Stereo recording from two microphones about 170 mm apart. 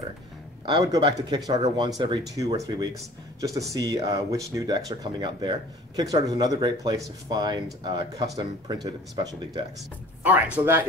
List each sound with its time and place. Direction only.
0.7 s speech: 25° right (ahead or behind)
10.2 s speech: 10° right (ahead or behind)